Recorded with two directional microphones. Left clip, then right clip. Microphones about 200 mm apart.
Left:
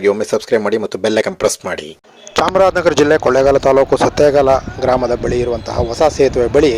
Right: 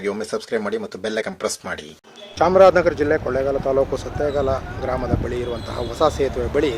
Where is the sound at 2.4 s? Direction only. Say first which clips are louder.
Left 1 dB; 55° left (ahead or behind).